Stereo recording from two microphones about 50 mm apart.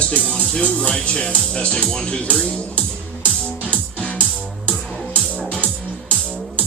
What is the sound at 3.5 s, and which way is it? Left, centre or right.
Music, left.